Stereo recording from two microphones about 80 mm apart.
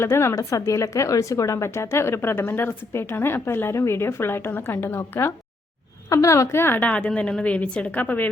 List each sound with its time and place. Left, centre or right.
0.0 s speech: left
0.3 s speech: left
6.1 s a woman's voice: left